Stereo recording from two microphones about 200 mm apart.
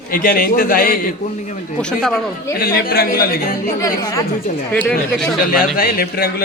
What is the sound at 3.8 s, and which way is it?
Speech, 15° left (ahead or behind).